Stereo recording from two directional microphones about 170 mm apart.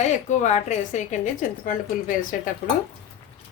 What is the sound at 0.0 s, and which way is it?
A woman's voice, 45° left (ahead or behind).